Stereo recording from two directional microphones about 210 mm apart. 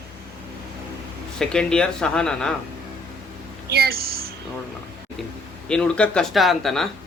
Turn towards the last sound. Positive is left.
turn(degrees=0)  # may be behind; listen again after turning